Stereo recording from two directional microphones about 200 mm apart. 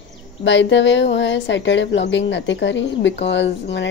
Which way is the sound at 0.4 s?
65° left (ahead or behind).